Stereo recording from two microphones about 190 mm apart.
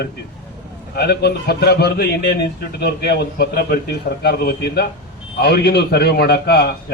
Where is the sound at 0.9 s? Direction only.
60° left (ahead or behind).